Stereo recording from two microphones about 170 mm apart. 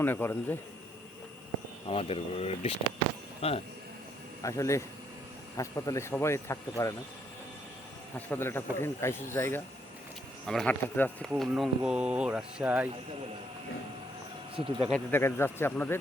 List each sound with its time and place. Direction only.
0.0 s speech: 10° left (ahead or behind)
1.9 s speech: 35° left (ahead or behind)
4.4 s speech: 20° left (ahead or behind)
8.3 s speech: 15° left (ahead or behind)
10.4 s speech: 5° left (ahead or behind)
11.3 s speech: centre (ahead or behind)
14.5 s speech: 30° right (ahead or behind)
14.8 s speech: 10° left (ahead or behind)